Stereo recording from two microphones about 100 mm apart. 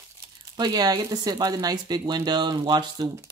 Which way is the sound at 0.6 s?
45° right (ahead or behind).